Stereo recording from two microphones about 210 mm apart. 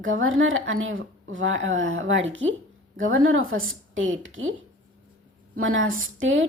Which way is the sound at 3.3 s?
75° right (ahead or behind).